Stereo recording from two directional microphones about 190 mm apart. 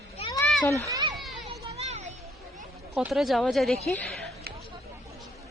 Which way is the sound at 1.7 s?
35° right (ahead or behind).